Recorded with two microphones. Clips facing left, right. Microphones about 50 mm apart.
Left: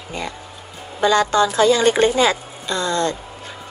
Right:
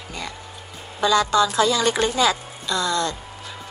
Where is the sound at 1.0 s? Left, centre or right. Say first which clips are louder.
Left 2 dB; left.